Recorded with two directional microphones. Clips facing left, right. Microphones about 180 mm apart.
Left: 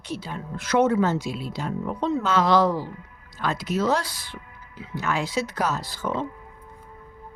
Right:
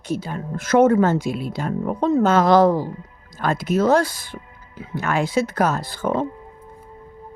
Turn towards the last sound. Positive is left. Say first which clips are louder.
# right 6 dB
turn(degrees=-50)  # may be behind; listen again after turning